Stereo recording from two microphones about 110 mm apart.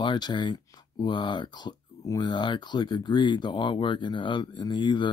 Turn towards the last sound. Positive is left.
turn(degrees=45)  # may be behind; listen again after turning